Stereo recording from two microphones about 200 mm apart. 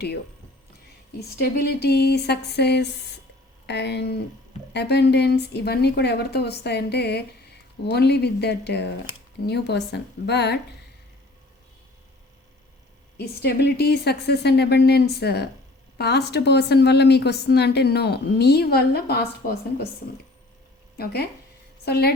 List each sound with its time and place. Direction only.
1.4 s a woman's voice: 50° left (ahead or behind)
13.1 s a woman's voice: 55° left (ahead or behind)
21.0 s a woman's voice: 50° left (ahead or behind)